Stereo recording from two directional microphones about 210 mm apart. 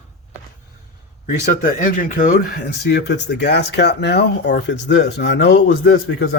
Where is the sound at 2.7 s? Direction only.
55° left (ahead or behind).